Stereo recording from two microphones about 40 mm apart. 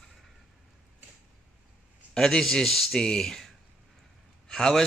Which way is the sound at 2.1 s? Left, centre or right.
Centre.